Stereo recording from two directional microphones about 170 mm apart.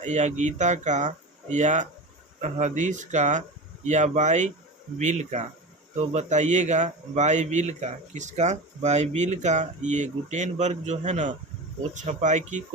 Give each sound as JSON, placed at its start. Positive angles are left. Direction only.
{"t": 0.0, "sound": "a man's voice", "side_deg": -45}